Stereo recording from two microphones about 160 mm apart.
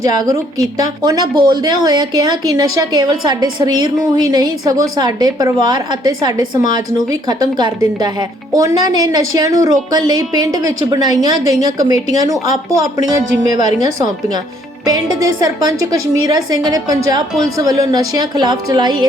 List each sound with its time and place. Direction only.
0.0 s speech: 25° right (ahead or behind)